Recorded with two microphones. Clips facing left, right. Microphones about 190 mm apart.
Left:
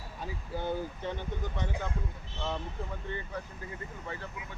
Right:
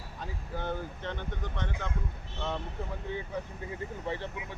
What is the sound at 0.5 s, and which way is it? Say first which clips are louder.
Speech: left 2 dB; 10° left (ahead or behind).